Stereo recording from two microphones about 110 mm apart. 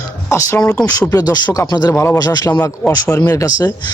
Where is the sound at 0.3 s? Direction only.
25° left (ahead or behind).